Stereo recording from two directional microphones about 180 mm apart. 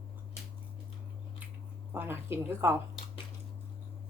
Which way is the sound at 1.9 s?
10° right (ahead or behind).